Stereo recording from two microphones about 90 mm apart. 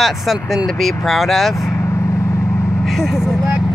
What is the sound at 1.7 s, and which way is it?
Vehicle, 35° left (ahead or behind).